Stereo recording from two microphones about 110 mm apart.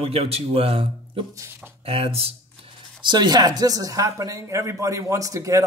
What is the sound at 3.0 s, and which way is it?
Speech, 40° right (ahead or behind).